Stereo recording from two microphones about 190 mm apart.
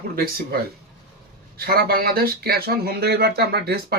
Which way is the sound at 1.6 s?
55° right (ahead or behind).